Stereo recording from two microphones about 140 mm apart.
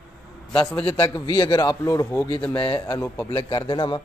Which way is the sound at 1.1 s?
30° left (ahead or behind).